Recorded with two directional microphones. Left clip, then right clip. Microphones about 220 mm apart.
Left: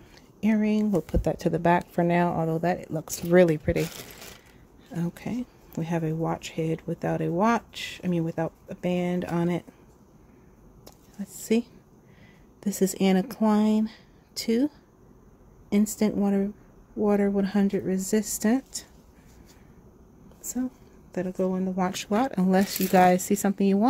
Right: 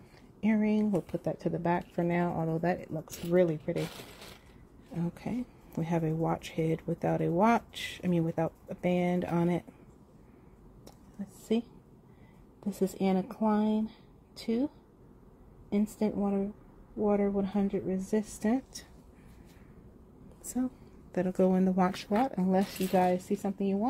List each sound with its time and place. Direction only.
0.4 s speech: 15° left (ahead or behind)
2.9 s speech: 25° left (ahead or behind)
4.9 s speech: 15° left (ahead or behind)
12.5 s speech: 25° left (ahead or behind)
15.7 s speech: 25° left (ahead or behind)
21.3 s speech: 15° right (ahead or behind)
21.9 s speech: 10° left (ahead or behind); by 23.9 s 35° left (ahead or behind)